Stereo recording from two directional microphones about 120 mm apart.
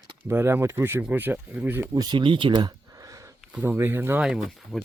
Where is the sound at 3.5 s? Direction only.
15° right (ahead or behind).